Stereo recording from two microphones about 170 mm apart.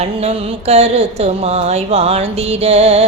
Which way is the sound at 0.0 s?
35° right (ahead or behind).